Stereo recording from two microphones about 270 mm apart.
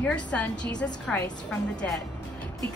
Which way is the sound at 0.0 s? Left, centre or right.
Centre.